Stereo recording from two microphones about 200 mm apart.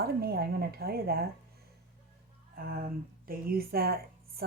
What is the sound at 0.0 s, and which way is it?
A woman's voice, 50° right (ahead or behind).